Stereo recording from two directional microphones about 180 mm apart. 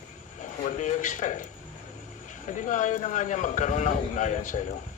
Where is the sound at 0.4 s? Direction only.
40° left (ahead or behind).